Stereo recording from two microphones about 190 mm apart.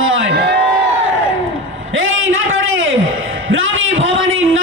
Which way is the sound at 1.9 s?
90° right.